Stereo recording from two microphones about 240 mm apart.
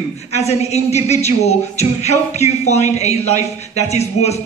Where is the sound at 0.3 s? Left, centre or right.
Left.